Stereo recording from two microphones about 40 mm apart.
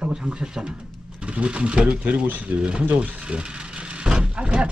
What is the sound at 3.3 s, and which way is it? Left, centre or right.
Vehicle, right.